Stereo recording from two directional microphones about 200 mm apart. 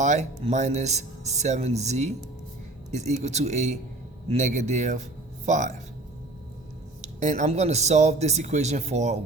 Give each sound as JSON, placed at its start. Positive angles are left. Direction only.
{"t": 0.0, "sound": "speech", "side_deg": -35}
{"t": 7.0, "sound": "speech", "side_deg": -35}